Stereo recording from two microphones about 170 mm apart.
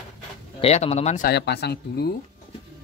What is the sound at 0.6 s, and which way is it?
Speech, 40° left (ahead or behind).